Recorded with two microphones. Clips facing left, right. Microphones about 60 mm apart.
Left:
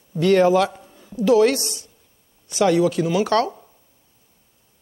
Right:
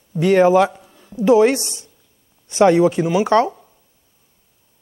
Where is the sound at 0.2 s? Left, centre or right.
Centre.